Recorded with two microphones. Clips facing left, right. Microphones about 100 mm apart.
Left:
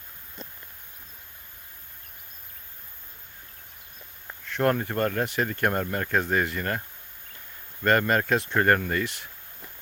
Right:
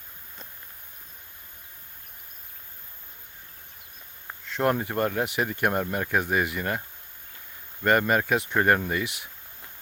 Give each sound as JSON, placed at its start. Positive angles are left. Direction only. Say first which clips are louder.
{"t": 4.4, "sound": "speech", "louder": "left 1 dB", "side_deg": -15}